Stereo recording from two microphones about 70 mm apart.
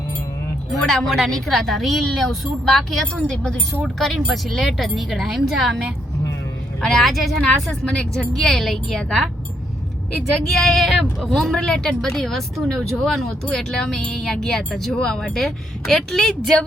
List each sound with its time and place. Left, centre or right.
0.7 s a woman's voice: centre
3.8 s a woman's voice: centre
6.8 s a woman's voice: centre
10.4 s a woman's voice: centre